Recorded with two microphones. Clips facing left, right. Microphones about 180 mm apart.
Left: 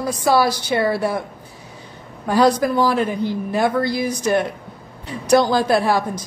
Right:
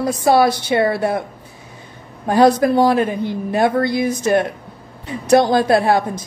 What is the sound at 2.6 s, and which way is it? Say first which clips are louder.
Speech: right 4 dB; 65° right (ahead or behind).